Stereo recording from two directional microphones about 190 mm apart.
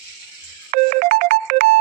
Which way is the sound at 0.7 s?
45° right (ahead or behind).